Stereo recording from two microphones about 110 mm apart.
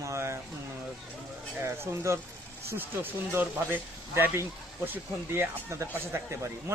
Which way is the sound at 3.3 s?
20° right (ahead or behind).